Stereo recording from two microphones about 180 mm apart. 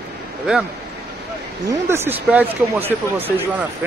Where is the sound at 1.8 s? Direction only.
15° right (ahead or behind).